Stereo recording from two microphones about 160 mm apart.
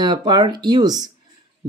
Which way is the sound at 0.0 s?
30° right (ahead or behind).